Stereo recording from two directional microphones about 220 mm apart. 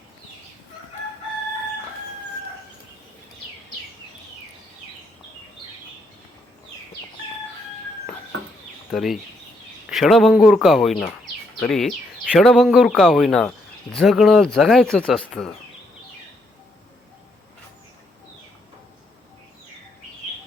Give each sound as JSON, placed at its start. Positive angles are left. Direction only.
{"t": 8.9, "sound": "speech", "side_deg": 0}